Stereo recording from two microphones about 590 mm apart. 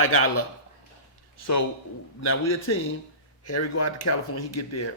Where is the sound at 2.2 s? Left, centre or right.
Left.